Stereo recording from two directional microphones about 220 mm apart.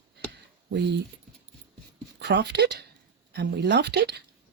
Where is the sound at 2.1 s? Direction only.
50° right (ahead or behind).